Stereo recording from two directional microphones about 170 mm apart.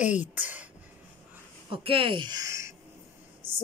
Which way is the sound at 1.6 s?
30° right (ahead or behind).